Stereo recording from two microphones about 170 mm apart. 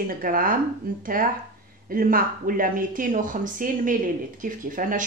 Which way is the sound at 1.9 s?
55° right (ahead or behind).